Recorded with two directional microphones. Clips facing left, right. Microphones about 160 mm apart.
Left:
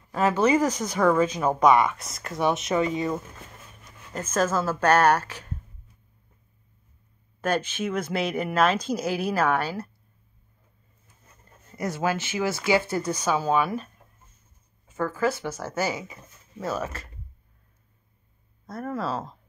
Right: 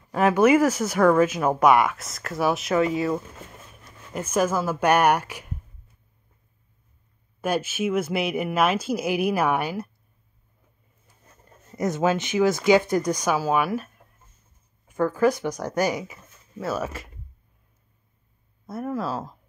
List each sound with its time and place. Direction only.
0.1 s speech: 15° right (ahead or behind)
7.4 s speech: 10° right (ahead or behind)
11.7 s speech: 20° right (ahead or behind)
14.9 s speech: 15° right (ahead or behind)
18.7 s speech: 5° right (ahead or behind)